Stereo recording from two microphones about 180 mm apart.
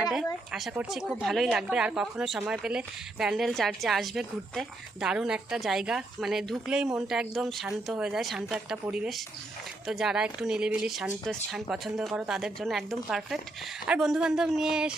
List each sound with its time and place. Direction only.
0.1 s speech: 5° right (ahead or behind)